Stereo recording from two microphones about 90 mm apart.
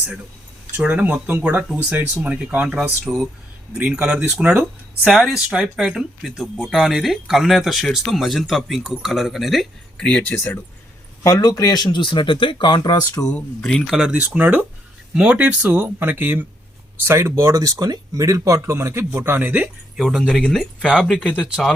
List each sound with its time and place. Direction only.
0.8 s speech: 15° right (ahead or behind)
3.0 s speech: 5° right (ahead or behind)
10.3 s speech: 25° left (ahead or behind)
11.2 s speech: 45° left (ahead or behind)
13.3 s speech: 20° left (ahead or behind)
13.7 s speech: 5° right (ahead or behind); by 17.5 s 30° right (ahead or behind)
17.5 s speech: 40° right (ahead or behind); by 19.7 s 20° right (ahead or behind)
20.0 s speech: centre (ahead or behind)
20.8 s speech: 10° right (ahead or behind)